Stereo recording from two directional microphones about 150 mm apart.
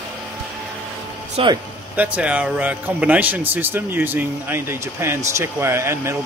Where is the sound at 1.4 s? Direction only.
40° right (ahead or behind).